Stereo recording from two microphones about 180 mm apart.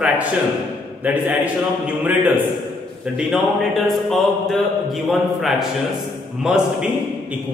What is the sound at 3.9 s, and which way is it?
A man's voice, centre (ahead or behind).